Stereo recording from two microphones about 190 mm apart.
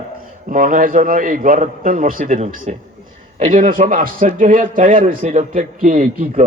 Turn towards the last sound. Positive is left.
turn(degrees=-45)  # may be behind; listen again after turning